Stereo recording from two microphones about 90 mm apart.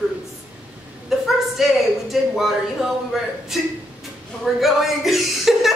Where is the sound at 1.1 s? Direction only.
Centre (ahead or behind).